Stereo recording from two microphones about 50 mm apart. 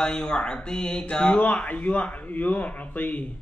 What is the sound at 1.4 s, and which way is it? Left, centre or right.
Speech, left.